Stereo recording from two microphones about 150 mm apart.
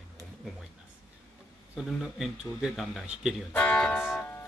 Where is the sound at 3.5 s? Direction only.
10° left (ahead or behind).